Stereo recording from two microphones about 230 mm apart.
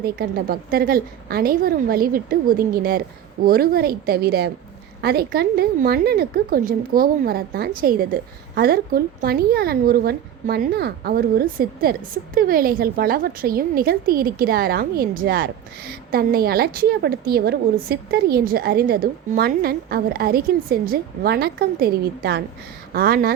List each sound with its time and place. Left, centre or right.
0.0 s a woman's voice: right